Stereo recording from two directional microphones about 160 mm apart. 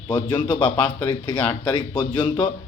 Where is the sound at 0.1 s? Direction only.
25° left (ahead or behind).